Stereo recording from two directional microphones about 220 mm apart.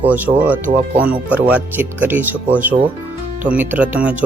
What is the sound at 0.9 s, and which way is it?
Speech, 40° right (ahead or behind).